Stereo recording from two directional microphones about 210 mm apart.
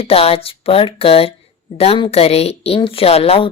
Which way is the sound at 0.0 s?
30° left (ahead or behind).